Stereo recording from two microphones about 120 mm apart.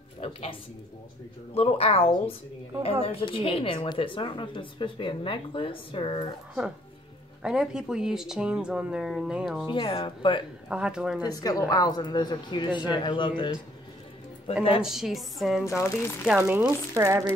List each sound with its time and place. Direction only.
0.2 s a woman's voice: 55° left (ahead or behind)
7.4 s speech: 5° right (ahead or behind)
9.7 s speech: 50° left (ahead or behind)
10.7 s speech: 10° right (ahead or behind)
11.2 s speech: 30° left (ahead or behind)
14.8 s speech: 5° right (ahead or behind)
15.6 s speech: 25° left (ahead or behind)
16.4 s speech: 15° right (ahead or behind)
16.9 s speech: 25° right (ahead or behind)